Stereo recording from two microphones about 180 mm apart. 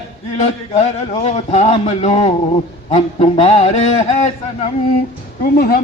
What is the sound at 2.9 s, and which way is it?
A man's voice, 35° left (ahead or behind).